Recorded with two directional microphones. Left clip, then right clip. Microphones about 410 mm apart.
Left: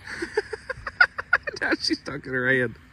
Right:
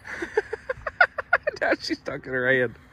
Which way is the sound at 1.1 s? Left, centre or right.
Centre.